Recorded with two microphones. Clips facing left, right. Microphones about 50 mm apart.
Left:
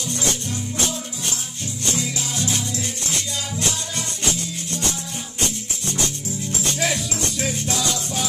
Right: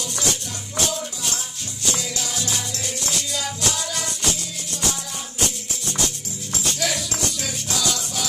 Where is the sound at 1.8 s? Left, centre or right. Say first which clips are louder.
Left 1 dB; left.